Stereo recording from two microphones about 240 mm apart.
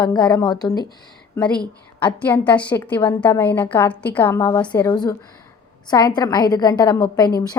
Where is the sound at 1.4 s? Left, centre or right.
Centre.